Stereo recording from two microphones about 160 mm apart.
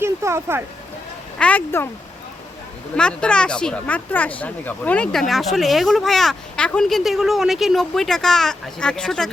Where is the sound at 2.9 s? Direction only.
5° left (ahead or behind).